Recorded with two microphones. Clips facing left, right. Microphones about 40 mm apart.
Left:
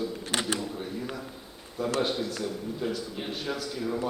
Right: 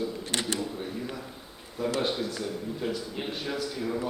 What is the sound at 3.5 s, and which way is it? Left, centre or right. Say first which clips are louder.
Speech: even; centre.